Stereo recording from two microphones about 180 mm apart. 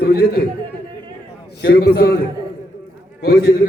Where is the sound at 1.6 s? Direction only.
60° left (ahead or behind).